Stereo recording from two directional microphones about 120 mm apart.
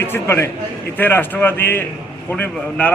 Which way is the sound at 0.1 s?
20° left (ahead or behind).